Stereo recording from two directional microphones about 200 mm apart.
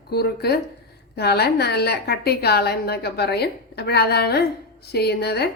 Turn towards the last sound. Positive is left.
turn(degrees=55)  # may be behind; listen again after turning